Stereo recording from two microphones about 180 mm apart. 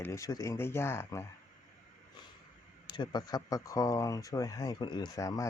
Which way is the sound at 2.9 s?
25° left (ahead or behind).